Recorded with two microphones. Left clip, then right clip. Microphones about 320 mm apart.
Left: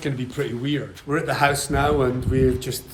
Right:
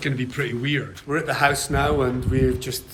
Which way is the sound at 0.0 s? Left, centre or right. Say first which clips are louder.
Right 1 dB; centre.